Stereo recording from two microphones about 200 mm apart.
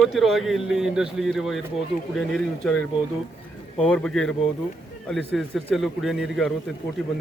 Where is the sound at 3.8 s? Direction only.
5° left (ahead or behind).